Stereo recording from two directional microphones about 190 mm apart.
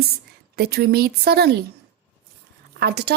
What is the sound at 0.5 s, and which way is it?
A woman's voice, 55° right (ahead or behind).